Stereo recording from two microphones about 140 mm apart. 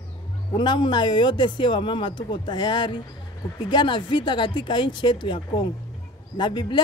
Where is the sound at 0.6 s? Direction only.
35° left (ahead or behind).